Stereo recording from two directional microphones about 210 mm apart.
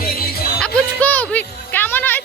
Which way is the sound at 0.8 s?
10° left (ahead or behind).